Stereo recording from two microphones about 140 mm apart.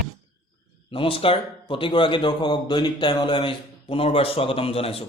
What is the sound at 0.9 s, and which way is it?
Speech, 40° left (ahead or behind).